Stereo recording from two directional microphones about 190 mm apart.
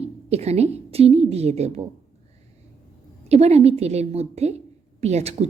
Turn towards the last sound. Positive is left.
turn(degrees=-35)  # may be behind; listen again after turning